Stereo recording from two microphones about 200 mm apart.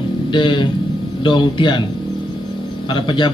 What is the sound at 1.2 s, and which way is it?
Speech, 25° left (ahead or behind).